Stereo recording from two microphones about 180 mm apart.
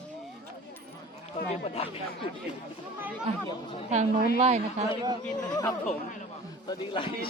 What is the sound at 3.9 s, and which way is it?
Speech, 40° right (ahead or behind).